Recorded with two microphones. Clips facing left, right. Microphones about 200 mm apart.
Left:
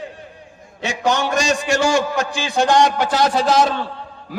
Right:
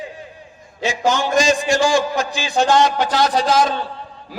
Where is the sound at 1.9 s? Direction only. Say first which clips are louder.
Even; 55° left (ahead or behind).